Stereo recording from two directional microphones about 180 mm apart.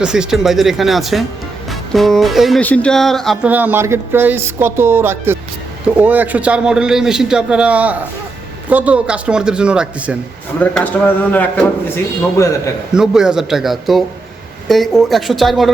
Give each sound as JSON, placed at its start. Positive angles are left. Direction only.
{"t": 0.0, "sound": "speech", "side_deg": -5}
{"t": 3.5, "sound": "a man's voice", "side_deg": -10}
{"t": 10.6, "sound": "speech", "side_deg": 10}
{"t": 12.9, "sound": "speech", "side_deg": -5}